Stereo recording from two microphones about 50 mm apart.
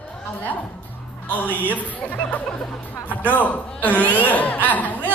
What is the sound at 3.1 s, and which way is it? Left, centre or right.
A woman's voice, left.